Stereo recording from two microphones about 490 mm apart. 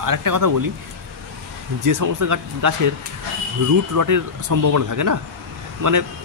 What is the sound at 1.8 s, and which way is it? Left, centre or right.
Speech, right.